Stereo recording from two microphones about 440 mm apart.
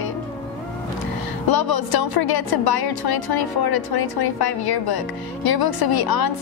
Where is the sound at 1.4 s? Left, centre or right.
Left.